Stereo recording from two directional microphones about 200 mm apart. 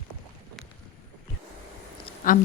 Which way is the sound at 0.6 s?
Centre (ahead or behind).